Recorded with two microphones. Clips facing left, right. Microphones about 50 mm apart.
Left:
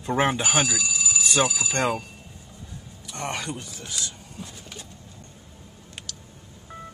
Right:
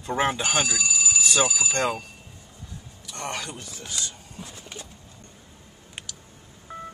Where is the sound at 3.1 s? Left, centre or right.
Centre.